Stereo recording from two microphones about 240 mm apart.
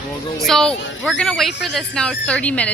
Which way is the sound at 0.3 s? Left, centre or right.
Centre.